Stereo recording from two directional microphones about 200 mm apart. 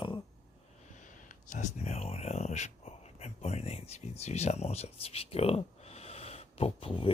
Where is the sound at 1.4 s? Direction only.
35° left (ahead or behind).